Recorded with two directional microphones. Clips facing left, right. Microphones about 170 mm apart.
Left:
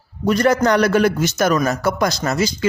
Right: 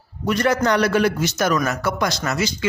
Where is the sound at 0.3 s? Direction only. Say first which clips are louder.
Left 3 dB; 40° left (ahead or behind).